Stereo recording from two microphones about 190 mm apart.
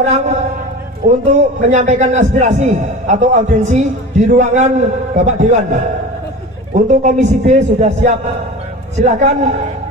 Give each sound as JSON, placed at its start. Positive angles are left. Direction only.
{"t": 0.0, "sound": "a man's voice", "side_deg": -35}
{"t": 6.7, "sound": "a man's voice", "side_deg": -40}